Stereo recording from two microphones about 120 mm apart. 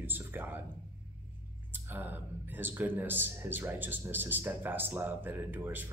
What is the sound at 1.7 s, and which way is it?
Speech, 15° right (ahead or behind).